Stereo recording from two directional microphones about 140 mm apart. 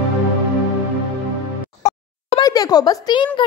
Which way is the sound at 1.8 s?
55° left (ahead or behind).